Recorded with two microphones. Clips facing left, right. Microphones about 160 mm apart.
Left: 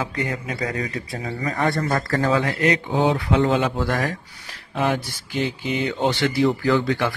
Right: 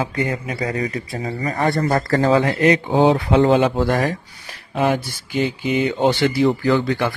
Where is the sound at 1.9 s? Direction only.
35° right (ahead or behind).